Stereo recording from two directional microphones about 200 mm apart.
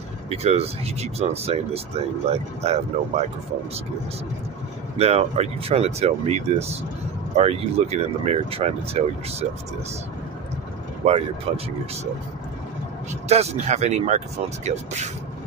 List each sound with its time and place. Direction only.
0.3 s speech: 30° right (ahead or behind)
4.9 s speech: 30° right (ahead or behind)
11.1 s speech: 30° right (ahead or behind)
13.3 s speech: 35° right (ahead or behind)